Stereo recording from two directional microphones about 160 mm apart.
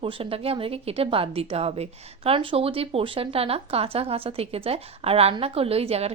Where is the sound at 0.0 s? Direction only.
35° right (ahead or behind).